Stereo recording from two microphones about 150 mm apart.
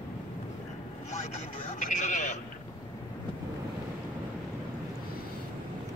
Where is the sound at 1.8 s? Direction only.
55° left (ahead or behind).